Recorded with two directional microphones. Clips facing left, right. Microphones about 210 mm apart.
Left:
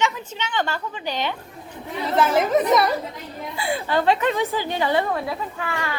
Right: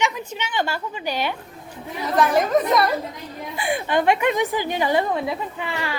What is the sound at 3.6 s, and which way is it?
A woman's voice, 15° right (ahead or behind).